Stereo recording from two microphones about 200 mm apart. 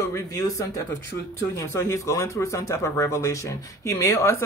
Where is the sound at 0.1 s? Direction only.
15° left (ahead or behind).